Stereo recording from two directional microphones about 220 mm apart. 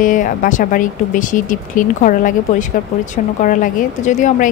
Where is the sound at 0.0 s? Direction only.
35° left (ahead or behind).